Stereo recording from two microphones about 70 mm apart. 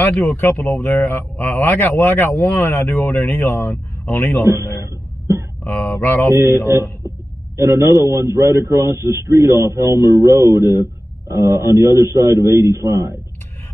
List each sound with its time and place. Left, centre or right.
0.1 s speech: centre
0.4 s speech: left
5.6 s speech: left
6.3 s a man's voice: right
9.6 s a man's voice: right